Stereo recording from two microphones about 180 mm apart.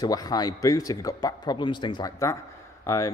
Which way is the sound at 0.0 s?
20° left (ahead or behind).